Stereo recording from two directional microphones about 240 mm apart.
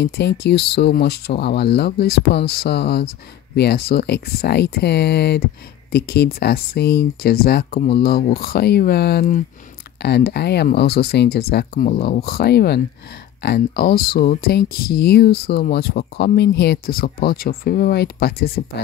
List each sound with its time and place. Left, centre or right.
0.0 s speech: left